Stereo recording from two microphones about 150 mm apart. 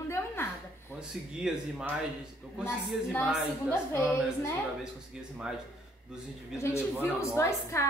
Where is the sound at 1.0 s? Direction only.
5° right (ahead or behind).